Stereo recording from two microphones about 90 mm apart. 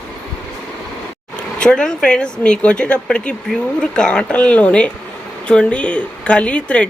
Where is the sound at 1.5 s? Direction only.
10° left (ahead or behind).